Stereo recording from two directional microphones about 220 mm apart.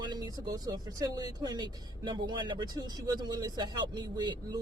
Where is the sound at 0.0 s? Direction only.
20° right (ahead or behind).